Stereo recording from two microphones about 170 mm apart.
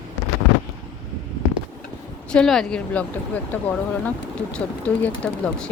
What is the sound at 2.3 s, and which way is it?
Speech, centre (ahead or behind).